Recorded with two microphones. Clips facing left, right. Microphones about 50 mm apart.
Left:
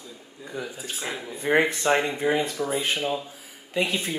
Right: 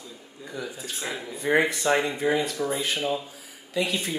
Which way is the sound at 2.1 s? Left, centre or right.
Left.